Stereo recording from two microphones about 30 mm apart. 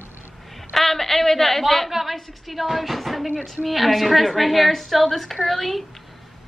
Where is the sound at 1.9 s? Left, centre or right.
Centre.